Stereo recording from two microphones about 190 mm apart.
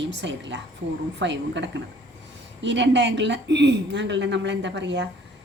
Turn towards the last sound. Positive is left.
turn(degrees=-70)  # may be behind; listen again after turning